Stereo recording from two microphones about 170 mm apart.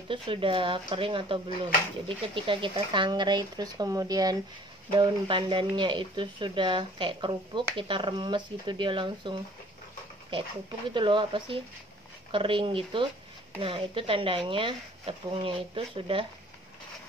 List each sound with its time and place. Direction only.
0.1 s speech: 30° right (ahead or behind)
10.9 s speech: 30° right (ahead or behind)